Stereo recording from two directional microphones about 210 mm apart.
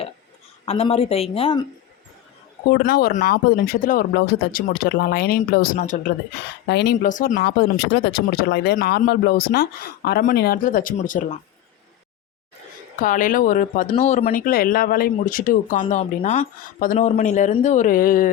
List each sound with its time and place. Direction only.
0.6 s speech: 30° left (ahead or behind)
2.6 s speech: 45° left (ahead or behind)
6.3 s speech: 55° left (ahead or behind)
7.1 s speech: 40° left (ahead or behind)
13.0 s speech: 40° left (ahead or behind)